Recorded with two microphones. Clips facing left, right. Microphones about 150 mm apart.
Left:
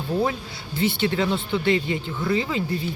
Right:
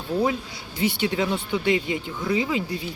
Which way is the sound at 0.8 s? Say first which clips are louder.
Left 1 dB; 10° right (ahead or behind).